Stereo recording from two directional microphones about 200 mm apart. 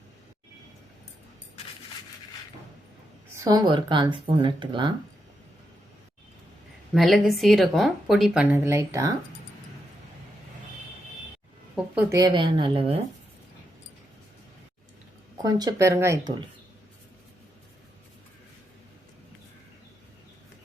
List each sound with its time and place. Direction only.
3.3 s speech: 20° right (ahead or behind)
6.9 s speech: centre (ahead or behind); by 9.1 s 15° right (ahead or behind)
11.9 s speech: 15° right (ahead or behind)
15.4 s speech: 20° right (ahead or behind)